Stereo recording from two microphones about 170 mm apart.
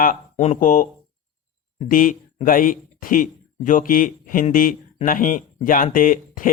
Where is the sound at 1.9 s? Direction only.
50° left (ahead or behind).